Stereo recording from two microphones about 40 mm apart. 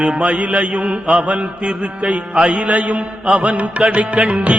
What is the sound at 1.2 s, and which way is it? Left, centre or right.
Carnatic music, right.